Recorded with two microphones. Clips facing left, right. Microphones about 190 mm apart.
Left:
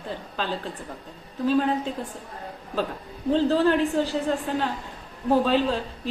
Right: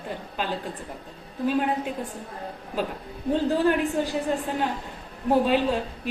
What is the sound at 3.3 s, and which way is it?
Speech, 15° right (ahead or behind).